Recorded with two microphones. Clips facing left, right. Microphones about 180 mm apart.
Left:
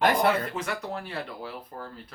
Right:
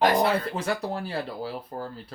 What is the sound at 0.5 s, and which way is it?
Speech, 35° right (ahead or behind).